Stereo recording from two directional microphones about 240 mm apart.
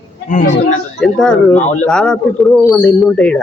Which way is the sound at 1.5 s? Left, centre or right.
Left.